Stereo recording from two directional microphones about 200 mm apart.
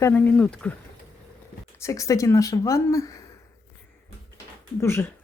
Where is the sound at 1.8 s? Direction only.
15° left (ahead or behind).